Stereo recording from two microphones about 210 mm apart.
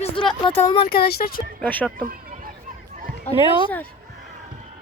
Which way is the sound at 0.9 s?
50° left (ahead or behind).